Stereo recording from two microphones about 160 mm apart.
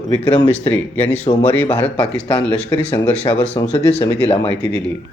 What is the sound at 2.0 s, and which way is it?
A man's voice, 35° left (ahead or behind).